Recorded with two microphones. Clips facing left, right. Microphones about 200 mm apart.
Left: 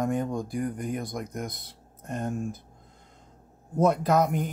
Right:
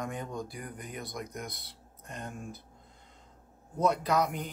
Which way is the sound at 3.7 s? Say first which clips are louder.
Left 5 dB; 50° left (ahead or behind).